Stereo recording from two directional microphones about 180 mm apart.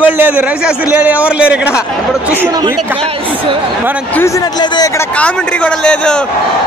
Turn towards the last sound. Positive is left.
turn(degrees=5)  # may be behind; listen again after turning